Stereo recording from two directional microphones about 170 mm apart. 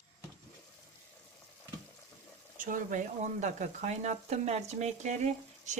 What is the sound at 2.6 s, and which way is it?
Speech, 50° right (ahead or behind).